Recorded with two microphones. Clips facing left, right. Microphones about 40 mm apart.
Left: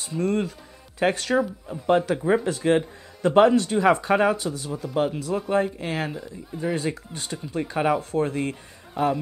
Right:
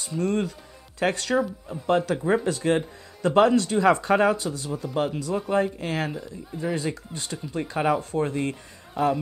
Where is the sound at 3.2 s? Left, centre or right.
Left.